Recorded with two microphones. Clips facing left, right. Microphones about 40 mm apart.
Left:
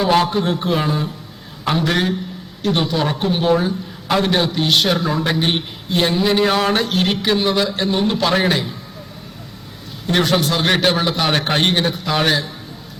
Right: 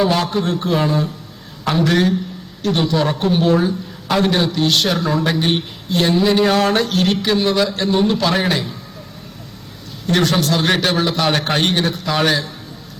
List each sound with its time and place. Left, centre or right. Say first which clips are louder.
0.1 s a man's voice: left 2 dB; centre
10.1 s a man's voice: right 1 dB; centre